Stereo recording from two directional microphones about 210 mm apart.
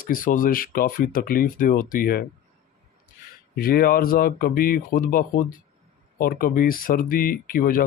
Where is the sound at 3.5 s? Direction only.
45° left (ahead or behind).